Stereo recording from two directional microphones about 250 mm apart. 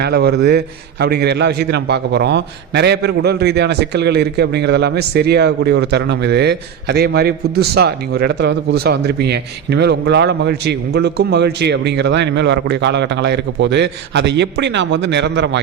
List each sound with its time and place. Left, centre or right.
0.0 s a man's voice: right